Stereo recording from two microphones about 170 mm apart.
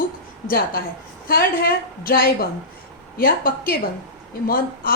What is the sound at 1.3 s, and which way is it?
A woman's voice, 60° left (ahead or behind).